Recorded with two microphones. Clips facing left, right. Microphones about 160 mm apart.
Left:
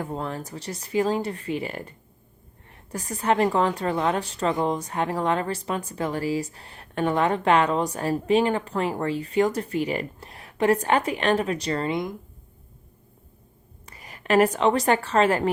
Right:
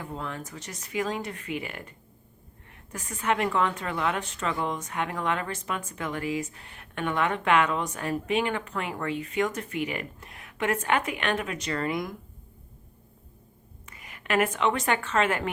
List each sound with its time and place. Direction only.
0.0 s speech: 40° left (ahead or behind)
13.8 s a woman's voice: 35° left (ahead or behind)